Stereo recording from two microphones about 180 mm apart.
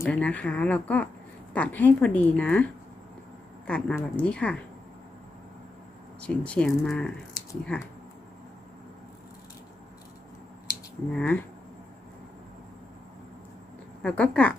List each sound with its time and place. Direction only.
0.0 s a woman's voice: 5° left (ahead or behind)
3.7 s a woman's voice: 5° left (ahead or behind)
6.2 s a woman's voice: 5° left (ahead or behind)
11.1 s a woman's voice: 10° left (ahead or behind)
14.0 s a woman's voice: 5° left (ahead or behind)